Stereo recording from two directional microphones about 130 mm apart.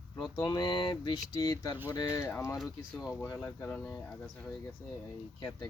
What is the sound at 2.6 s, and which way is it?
Speech, centre (ahead or behind).